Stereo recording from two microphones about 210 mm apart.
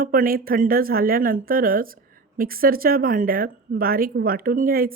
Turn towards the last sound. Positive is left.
turn(degrees=-45)  # may be behind; listen again after turning